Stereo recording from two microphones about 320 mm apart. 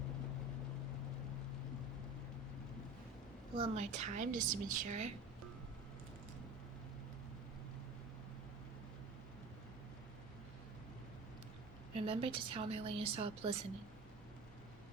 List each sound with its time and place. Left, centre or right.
3.6 s a woman's voice: right
11.9 s a woman's voice: centre